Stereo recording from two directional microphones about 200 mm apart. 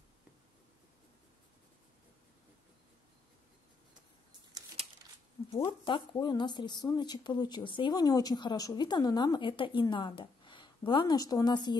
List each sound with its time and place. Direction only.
5.5 s speech: 25° left (ahead or behind)